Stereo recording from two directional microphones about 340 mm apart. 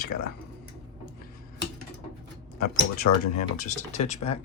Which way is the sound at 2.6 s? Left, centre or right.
Left.